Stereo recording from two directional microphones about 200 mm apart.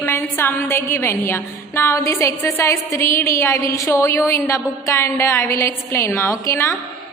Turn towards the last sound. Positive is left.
turn(degrees=15)  # may be behind; listen again after turning